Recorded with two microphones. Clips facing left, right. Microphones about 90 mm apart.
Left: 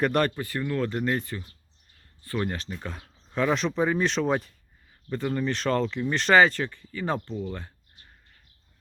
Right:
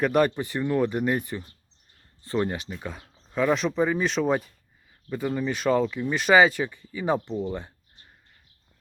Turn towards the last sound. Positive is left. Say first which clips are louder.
# right 4 dB
turn(degrees=-20)  # may be behind; listen again after turning